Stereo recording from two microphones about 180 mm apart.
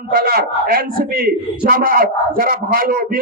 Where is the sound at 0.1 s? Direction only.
55° right (ahead or behind).